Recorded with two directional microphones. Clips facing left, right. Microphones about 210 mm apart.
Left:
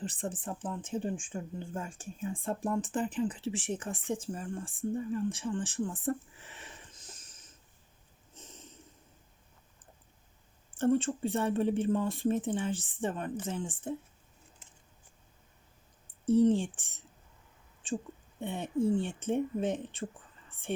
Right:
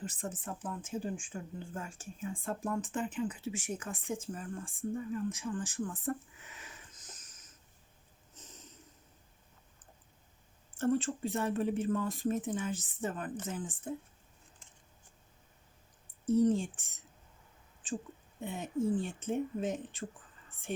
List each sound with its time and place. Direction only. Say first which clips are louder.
0.0 s speech: left 3 dB; 30° left (ahead or behind)
8.4 s snort: left 3 dB; 25° left (ahead or behind)
10.8 s speech: left 3 dB; 30° left (ahead or behind)
16.2 s speech: left 3 dB; 30° left (ahead or behind)
18.3 s speech: left 3 dB; 30° left (ahead or behind)